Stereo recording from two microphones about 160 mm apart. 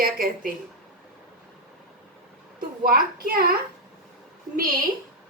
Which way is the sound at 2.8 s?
65° right (ahead or behind).